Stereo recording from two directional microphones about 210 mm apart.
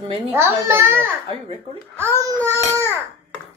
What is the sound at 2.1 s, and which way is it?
Speech, 10° left (ahead or behind).